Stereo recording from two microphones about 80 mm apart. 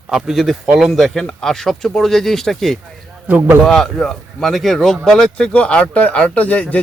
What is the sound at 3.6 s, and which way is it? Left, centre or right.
A man's voice, centre.